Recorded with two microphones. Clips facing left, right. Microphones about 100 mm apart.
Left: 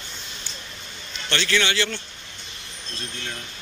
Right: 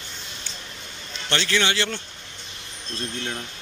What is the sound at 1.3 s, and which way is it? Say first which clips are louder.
Speech: even; 25° right (ahead or behind).